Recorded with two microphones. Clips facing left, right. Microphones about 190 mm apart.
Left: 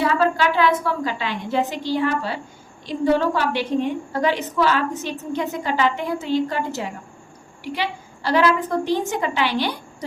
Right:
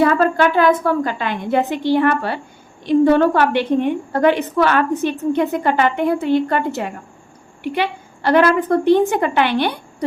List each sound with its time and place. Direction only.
0.0 s a woman's voice: 50° right (ahead or behind)